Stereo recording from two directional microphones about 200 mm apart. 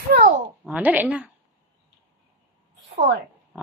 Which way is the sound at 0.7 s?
5° right (ahead or behind).